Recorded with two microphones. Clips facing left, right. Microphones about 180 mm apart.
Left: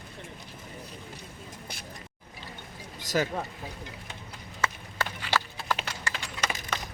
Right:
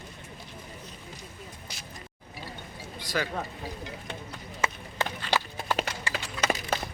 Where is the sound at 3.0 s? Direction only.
45° left (ahead or behind).